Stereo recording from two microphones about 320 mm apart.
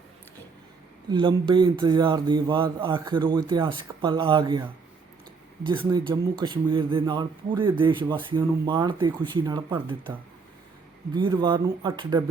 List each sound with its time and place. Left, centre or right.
1.1 s a man's voice: centre